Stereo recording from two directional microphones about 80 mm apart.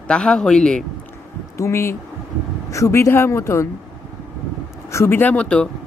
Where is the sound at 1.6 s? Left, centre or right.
Left.